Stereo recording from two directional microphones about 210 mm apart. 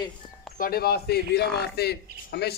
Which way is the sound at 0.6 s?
45° left (ahead or behind).